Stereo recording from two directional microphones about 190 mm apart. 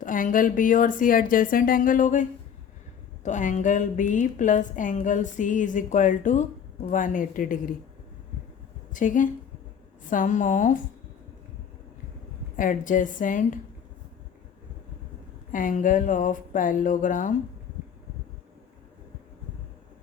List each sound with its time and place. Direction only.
0.0 s speech: 45° left (ahead or behind)
3.2 s a woman's voice: 40° left (ahead or behind)
8.9 s speech: 45° left (ahead or behind)
12.5 s speech: 45° left (ahead or behind)
15.5 s speech: 45° left (ahead or behind)